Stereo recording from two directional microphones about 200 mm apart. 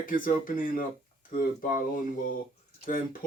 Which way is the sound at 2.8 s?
45° left (ahead or behind).